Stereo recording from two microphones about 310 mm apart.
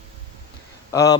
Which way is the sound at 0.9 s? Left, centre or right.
Centre.